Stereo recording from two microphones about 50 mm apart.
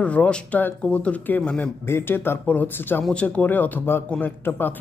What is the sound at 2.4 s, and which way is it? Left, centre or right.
Speech, left.